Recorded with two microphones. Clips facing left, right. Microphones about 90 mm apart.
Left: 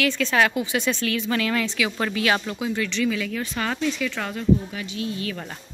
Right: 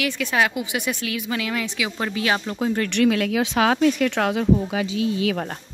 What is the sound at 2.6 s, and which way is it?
Speech, 40° right (ahead or behind).